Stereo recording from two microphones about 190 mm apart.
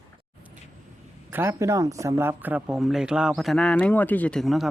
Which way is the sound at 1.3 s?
15° right (ahead or behind).